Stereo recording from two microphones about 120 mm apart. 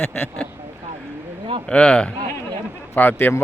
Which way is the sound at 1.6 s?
10° left (ahead or behind).